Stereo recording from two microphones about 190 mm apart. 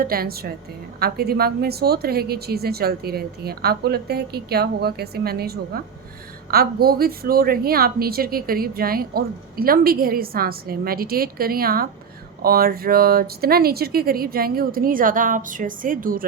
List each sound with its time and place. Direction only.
0.0 s a woman's voice: 50° right (ahead or behind)